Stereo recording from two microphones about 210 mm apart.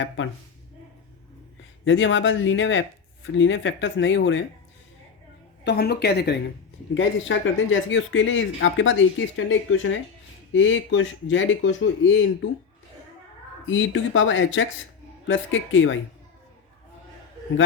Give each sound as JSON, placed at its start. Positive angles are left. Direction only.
{"t": 1.8, "sound": "speech", "side_deg": 65}
{"t": 5.6, "sound": "speech", "side_deg": 50}
{"t": 6.9, "sound": "speech", "side_deg": 65}
{"t": 13.7, "sound": "speech", "side_deg": 65}